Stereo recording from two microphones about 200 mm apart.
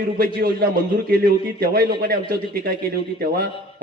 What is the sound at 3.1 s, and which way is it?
Speech, 50° right (ahead or behind).